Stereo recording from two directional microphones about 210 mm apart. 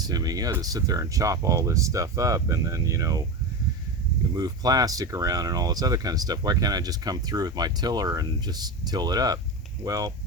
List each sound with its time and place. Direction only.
0.0 s speech: 20° right (ahead or behind)
4.4 s speech: 20° right (ahead or behind)